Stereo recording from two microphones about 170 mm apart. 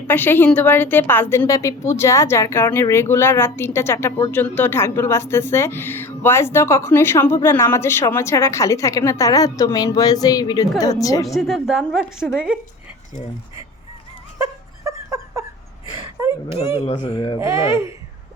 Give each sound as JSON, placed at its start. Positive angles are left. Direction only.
{"t": 0.1, "sound": "a woman's voice", "side_deg": 10}
{"t": 11.3, "sound": "a woman's voice", "side_deg": 0}
{"t": 14.3, "sound": "a sound", "side_deg": -20}
{"t": 16.7, "sound": "speech", "side_deg": 30}
{"t": 17.4, "sound": "speech", "side_deg": -15}